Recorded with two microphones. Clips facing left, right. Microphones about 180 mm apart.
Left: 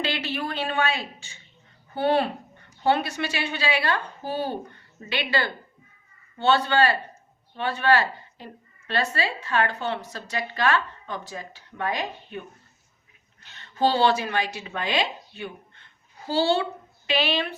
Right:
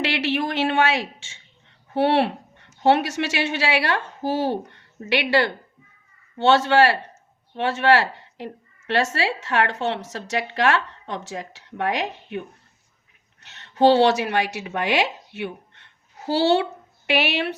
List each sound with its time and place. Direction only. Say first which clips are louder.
0.0 s a woman's voice: right 5 dB; 75° right (ahead or behind)
13.4 s speech: right 6 dB; 70° right (ahead or behind)